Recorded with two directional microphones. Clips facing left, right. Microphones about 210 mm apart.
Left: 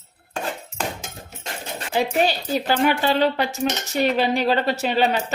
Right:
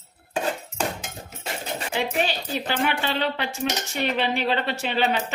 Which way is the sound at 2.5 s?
40° left (ahead or behind).